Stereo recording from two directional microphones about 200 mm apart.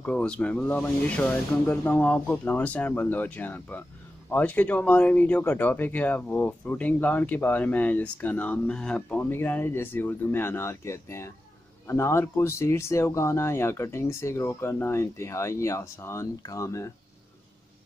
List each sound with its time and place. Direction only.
0.0 s speech: 5° left (ahead or behind)